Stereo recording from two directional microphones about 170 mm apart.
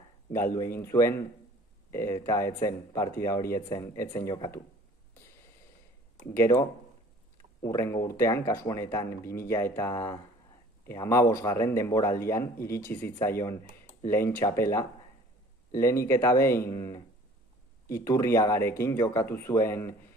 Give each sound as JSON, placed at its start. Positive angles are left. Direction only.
{"t": 0.3, "sound": "a man's voice", "side_deg": 15}
{"t": 7.6, "sound": "a man's voice", "side_deg": 15}